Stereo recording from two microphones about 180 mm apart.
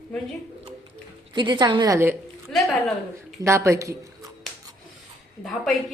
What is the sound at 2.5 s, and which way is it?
Speech, centre (ahead or behind).